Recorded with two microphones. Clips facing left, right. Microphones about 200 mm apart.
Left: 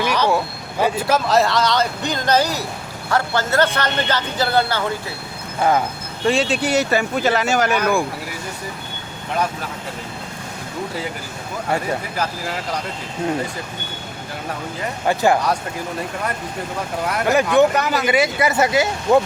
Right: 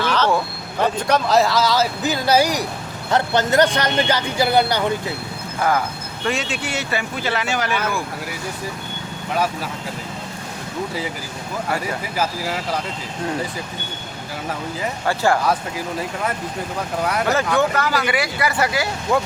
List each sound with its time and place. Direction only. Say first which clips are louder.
0.0 s speech: left 1 dB; 10° left (ahead or behind); by 5.1 s 15° right (ahead or behind)
5.5 s speech: left 2 dB; 25° left (ahead or behind); by 7.8 s 45° left (ahead or behind)
12.1 s speech: right 1 dB; 5° right (ahead or behind)
15.0 s speech: left 2 dB; 20° left (ahead or behind)
17.2 s speech: left 7 dB; 20° left (ahead or behind)